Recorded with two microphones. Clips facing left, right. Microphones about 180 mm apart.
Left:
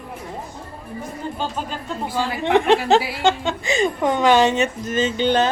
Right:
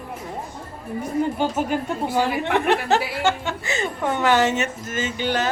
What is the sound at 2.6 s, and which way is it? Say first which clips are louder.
Speech: left 5 dB; 15° left (ahead or behind).